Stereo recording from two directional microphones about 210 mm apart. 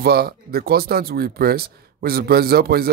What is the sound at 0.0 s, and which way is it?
A man's voice, 45° right (ahead or behind).